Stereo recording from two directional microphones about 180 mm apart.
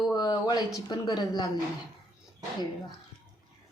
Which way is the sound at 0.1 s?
20° left (ahead or behind).